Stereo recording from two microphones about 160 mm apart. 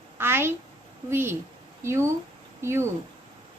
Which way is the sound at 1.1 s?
15° right (ahead or behind).